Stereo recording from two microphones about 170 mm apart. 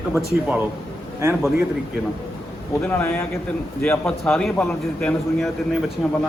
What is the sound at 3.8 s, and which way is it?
A man's voice, 10° left (ahead or behind).